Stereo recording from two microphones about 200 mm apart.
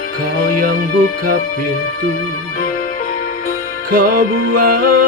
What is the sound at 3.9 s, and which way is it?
Music, 45° right (ahead or behind).